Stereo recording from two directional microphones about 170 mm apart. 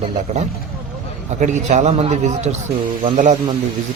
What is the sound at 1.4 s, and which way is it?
Speech, 45° right (ahead or behind).